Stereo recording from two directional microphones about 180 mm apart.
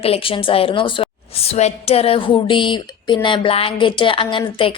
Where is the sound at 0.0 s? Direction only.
30° left (ahead or behind).